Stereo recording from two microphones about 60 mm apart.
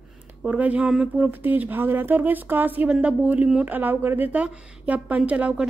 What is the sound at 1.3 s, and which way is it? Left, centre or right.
Speech, right.